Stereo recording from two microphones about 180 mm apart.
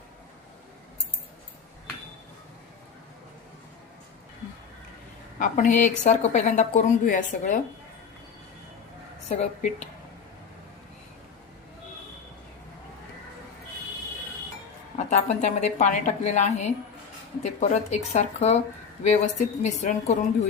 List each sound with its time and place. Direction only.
5.4 s a woman's voice: 45° left (ahead or behind)
9.3 s a woman's voice: 40° left (ahead or behind)
14.9 s a woman's voice: 40° left (ahead or behind)